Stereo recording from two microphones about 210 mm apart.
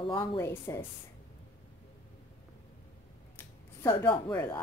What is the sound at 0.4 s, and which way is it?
Speech, 10° left (ahead or behind).